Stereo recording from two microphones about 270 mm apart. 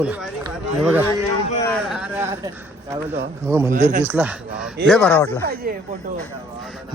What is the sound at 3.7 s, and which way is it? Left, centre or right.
Speech, right.